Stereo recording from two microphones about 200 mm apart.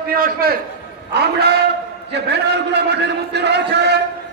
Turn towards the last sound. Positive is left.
turn(degrees=-55)  # may be behind; listen again after turning